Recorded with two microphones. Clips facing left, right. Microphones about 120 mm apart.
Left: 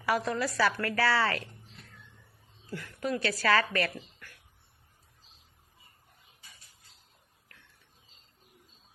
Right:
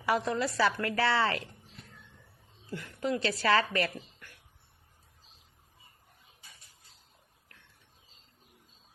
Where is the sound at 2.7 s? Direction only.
20° right (ahead or behind).